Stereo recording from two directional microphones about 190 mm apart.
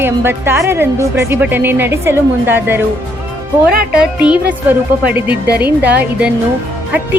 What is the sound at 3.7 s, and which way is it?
Speech, 50° right (ahead or behind).